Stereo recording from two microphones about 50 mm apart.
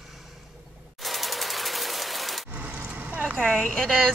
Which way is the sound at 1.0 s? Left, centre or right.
Centre.